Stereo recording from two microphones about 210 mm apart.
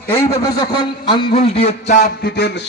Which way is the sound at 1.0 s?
25° left (ahead or behind).